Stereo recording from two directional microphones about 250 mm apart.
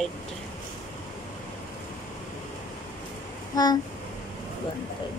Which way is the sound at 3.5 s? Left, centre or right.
Centre.